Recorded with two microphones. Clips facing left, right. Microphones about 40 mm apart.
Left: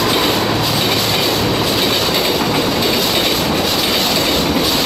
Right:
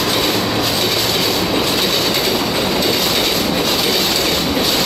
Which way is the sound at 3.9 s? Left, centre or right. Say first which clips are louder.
Left 1 dB; left.